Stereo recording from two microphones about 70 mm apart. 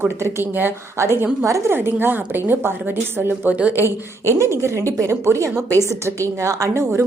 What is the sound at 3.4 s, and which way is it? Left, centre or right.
Speech, centre.